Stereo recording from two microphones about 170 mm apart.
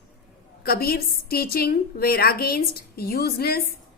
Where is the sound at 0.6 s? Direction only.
60° left (ahead or behind).